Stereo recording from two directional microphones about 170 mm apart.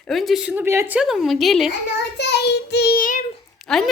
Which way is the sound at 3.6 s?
5° left (ahead or behind).